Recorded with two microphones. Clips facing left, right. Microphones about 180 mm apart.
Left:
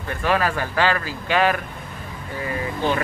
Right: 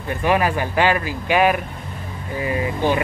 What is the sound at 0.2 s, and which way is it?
Speech, 15° right (ahead or behind).